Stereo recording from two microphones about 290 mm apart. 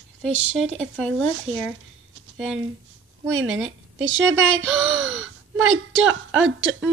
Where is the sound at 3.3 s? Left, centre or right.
Right.